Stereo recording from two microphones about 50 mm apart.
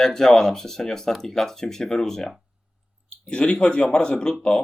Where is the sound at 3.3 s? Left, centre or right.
Centre.